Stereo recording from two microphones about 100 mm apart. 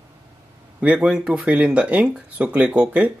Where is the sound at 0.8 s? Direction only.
10° right (ahead or behind).